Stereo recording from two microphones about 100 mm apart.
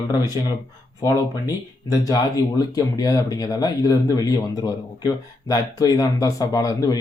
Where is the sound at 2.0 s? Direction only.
40° left (ahead or behind).